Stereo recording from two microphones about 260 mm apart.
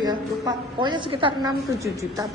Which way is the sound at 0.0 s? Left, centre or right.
Centre.